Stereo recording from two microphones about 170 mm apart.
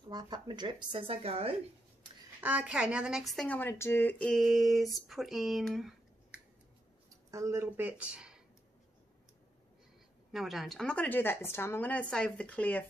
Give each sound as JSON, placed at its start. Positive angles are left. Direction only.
{"t": 0.1, "sound": "speech", "side_deg": -25}
{"t": 2.4, "sound": "a woman's voice", "side_deg": -10}
{"t": 7.2, "sound": "speech", "side_deg": -20}
{"t": 10.3, "sound": "a woman's voice", "side_deg": 0}